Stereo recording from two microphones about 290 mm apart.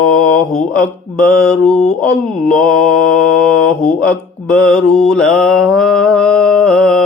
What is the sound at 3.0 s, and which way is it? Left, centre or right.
Mantra, left.